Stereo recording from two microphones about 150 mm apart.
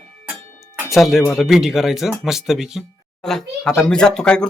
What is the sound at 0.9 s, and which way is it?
Speech, centre (ahead or behind).